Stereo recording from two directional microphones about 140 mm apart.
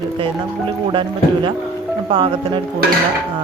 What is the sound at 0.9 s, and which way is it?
Speech, 35° right (ahead or behind).